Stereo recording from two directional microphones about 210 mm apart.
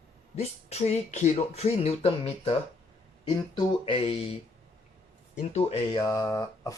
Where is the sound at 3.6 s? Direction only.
25° left (ahead or behind).